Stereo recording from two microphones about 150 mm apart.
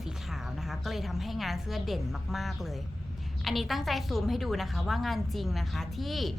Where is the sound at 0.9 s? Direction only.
Centre (ahead or behind).